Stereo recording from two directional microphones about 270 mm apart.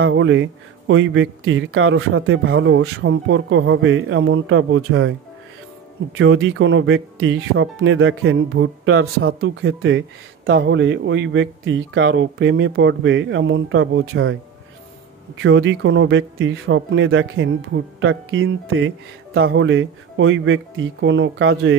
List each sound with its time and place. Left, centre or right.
0.0 s speech: right
6.1 s speech: right
15.3 s speech: right